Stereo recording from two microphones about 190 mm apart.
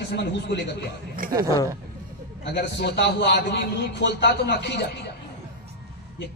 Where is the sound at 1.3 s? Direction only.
20° right (ahead or behind).